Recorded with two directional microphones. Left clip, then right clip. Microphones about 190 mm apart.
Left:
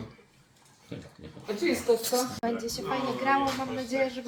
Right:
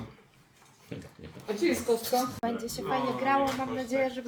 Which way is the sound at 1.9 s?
20° right (ahead or behind).